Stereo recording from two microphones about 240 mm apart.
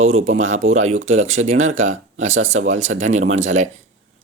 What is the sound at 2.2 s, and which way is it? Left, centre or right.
Speech, right.